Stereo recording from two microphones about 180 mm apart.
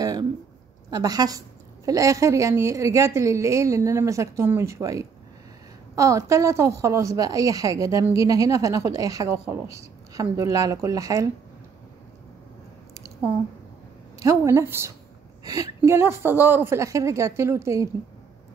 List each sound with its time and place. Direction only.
0.0 s a sound: 20° right (ahead or behind)
0.8 s a woman's voice: 20° right (ahead or behind)
12.9 s squish: 20° right (ahead or behind)
14.2 s a woman's voice: 15° right (ahead or behind)